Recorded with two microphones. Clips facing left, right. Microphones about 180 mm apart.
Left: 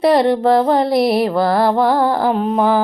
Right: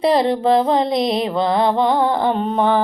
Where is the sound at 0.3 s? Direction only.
25° right (ahead or behind).